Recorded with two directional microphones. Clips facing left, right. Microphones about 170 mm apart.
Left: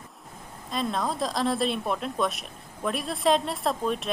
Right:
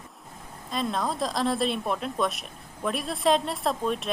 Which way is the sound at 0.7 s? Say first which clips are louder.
Even; centre (ahead or behind).